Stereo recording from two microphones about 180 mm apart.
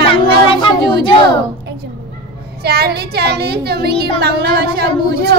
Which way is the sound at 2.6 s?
60° right (ahead or behind).